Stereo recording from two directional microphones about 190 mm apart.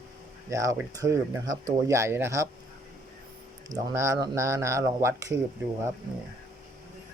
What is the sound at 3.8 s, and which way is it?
Speech, 15° right (ahead or behind).